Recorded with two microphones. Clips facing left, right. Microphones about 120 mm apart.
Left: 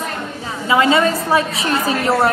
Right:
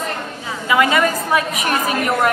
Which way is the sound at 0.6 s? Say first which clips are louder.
Left 2 dB; 30° left (ahead or behind).